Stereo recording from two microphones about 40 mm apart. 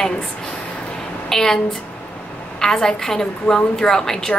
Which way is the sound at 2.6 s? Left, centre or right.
Centre.